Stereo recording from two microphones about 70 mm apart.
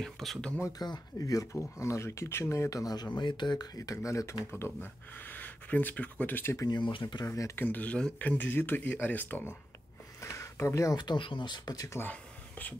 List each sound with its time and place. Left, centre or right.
0.0 s speech: centre
0.7 s speech: left
1.1 s speech: left
3.2 s speech: left
3.7 s speech: left
4.5 s speech: left
6.7 s speech: left
7.2 s speech: left
7.5 s speech: left
10.2 s a sound: left
11.0 s speech: left
12.0 s a sound: left